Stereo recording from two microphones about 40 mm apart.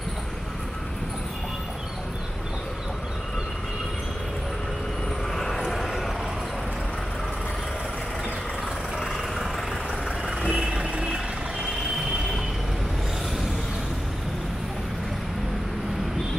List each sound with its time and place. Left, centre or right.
5.3 s vehicle: centre
9.0 s vehicle: centre
10.5 s vehicle: centre